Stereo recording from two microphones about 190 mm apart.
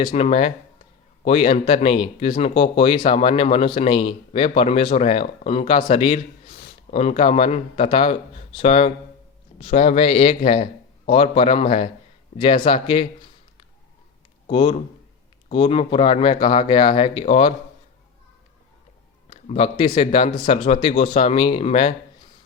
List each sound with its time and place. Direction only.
0.0 s a man's voice: 30° left (ahead or behind)
14.4 s a man's voice: 30° left (ahead or behind)
19.3 s speech: 30° left (ahead or behind)